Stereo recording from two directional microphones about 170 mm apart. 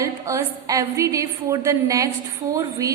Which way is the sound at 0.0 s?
20° right (ahead or behind).